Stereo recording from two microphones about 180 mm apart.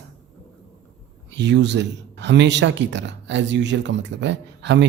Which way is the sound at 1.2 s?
75° right (ahead or behind).